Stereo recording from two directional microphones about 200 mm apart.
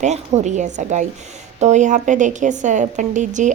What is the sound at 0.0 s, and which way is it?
A woman's voice, 35° right (ahead or behind).